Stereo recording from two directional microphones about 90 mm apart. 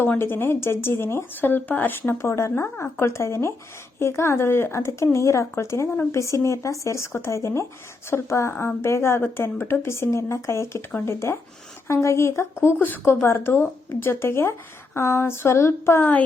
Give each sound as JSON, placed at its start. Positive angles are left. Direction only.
{"t": 0.2, "sound": "speech", "side_deg": 25}